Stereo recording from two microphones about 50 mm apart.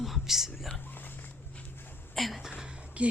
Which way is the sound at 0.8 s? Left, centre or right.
Left.